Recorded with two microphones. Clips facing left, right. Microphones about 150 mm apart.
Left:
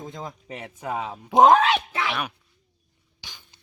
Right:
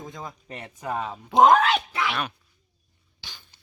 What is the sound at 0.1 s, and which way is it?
Speech, 20° left (ahead or behind).